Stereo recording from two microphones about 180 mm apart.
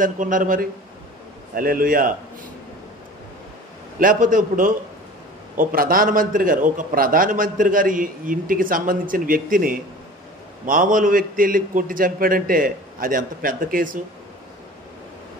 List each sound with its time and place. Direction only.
0.0 s a man's voice: 45° right (ahead or behind)
4.0 s a man's voice: 50° right (ahead or behind)